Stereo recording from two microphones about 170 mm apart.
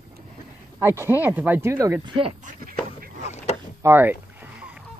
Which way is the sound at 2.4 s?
55° right (ahead or behind).